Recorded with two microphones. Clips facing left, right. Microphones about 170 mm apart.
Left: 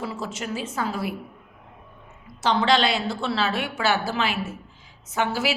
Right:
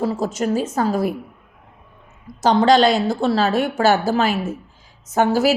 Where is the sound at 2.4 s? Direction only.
40° right (ahead or behind).